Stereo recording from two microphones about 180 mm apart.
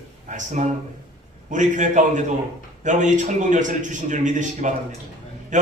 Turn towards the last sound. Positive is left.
turn(degrees=-45)  # may be behind; listen again after turning